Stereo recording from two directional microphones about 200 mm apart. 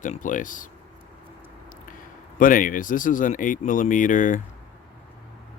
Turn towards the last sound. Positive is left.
turn(degrees=40)  # may be behind; listen again after turning